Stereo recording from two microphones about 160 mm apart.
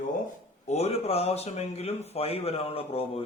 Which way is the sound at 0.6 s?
40° left (ahead or behind).